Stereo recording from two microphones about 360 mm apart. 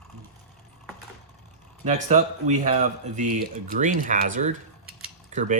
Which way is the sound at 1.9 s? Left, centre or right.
Centre.